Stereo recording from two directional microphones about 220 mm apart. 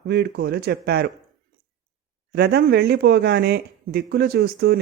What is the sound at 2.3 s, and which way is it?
Speech, 45° right (ahead or behind).